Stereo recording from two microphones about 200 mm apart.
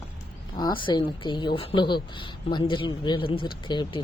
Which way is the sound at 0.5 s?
25° left (ahead or behind).